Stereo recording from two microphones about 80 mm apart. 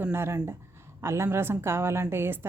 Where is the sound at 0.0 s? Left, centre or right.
Right.